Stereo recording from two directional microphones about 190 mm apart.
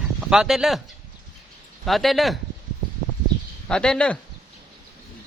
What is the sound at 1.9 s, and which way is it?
Speech, centre (ahead or behind).